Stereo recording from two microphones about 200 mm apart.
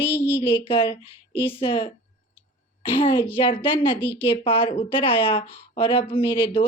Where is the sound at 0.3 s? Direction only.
30° left (ahead or behind).